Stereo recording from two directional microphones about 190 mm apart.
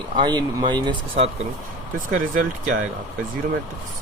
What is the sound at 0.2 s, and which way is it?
Speech, 25° right (ahead or behind).